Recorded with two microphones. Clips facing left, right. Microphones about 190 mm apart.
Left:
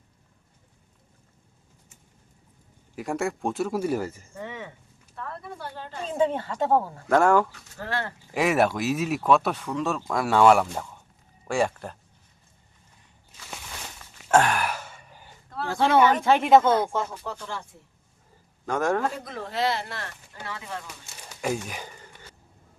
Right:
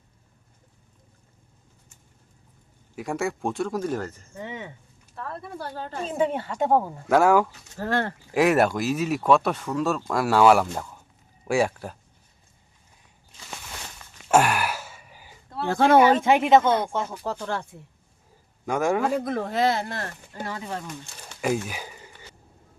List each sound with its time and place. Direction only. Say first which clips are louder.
2.9 s speech: even; centre (ahead or behind)
4.4 s a sound: right 2 dB; 20° right (ahead or behind)
5.1 s speech: right 2 dB; 40° right (ahead or behind)
6.1 s speech: left 1 dB; 10° right (ahead or behind)
7.8 s speech: right 5 dB; 45° right (ahead or behind)
8.3 s speech: right 2 dB; centre (ahead or behind)
14.3 s a sound: right 1 dB; 10° right (ahead or behind)
15.7 s speech: right 4 dB; 50° right (ahead or behind)
16.4 s speech: even; centre (ahead or behind)
17.2 s speech: right 5 dB; 40° right (ahead or behind)
18.6 s speech: right 2 dB; 10° right (ahead or behind)
19.1 s speech: right 7 dB; 55° right (ahead or behind); by 20.8 s 35° right (ahead or behind)
21.4 s a sound: right 3 dB; 5° right (ahead or behind)